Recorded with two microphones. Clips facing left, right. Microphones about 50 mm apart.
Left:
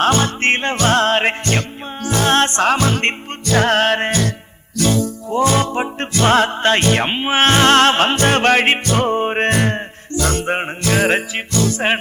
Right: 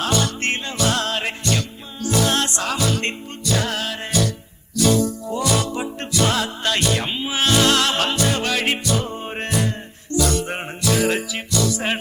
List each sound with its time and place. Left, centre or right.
0.0 s music: left